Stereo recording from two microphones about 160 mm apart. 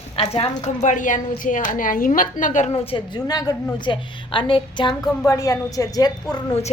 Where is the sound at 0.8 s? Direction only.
50° left (ahead or behind); by 6.5 s 25° left (ahead or behind).